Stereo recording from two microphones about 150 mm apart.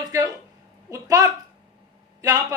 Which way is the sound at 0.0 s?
25° right (ahead or behind).